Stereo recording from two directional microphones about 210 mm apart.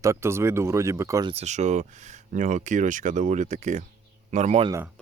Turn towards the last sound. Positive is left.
turn(degrees=-15)  # may be behind; listen again after turning